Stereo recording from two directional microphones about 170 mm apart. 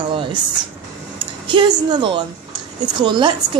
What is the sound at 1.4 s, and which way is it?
A woman's voice, 30° right (ahead or behind).